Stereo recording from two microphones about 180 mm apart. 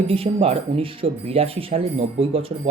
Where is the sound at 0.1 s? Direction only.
30° right (ahead or behind).